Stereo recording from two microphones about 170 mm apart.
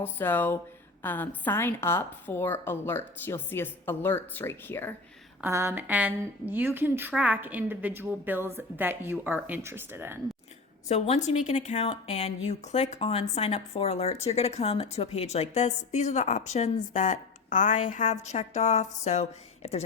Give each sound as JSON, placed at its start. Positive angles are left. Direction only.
{"t": 0.0, "sound": "a woman's voice", "side_deg": 10}
{"t": 5.4, "sound": "a woman's voice", "side_deg": -15}
{"t": 10.8, "sound": "speech", "side_deg": 40}